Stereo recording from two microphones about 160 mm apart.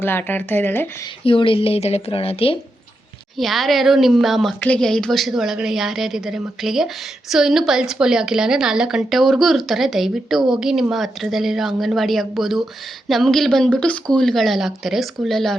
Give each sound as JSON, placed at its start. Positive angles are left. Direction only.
{"t": 0.0, "sound": "speech", "side_deg": 10}
{"t": 1.2, "sound": "speech", "side_deg": 35}
{"t": 3.3, "sound": "a woman's voice", "side_deg": 0}